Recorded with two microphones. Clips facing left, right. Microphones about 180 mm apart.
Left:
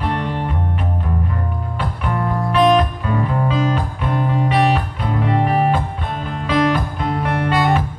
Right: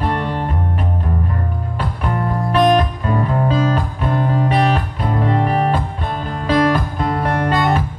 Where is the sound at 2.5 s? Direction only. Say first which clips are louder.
Even; 45° right (ahead or behind).